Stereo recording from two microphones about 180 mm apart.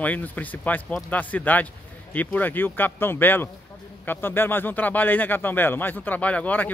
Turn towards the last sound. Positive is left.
turn(degrees=10)  # may be behind; listen again after turning